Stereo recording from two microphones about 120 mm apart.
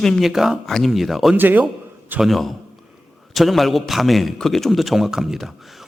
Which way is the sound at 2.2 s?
Centre (ahead or behind).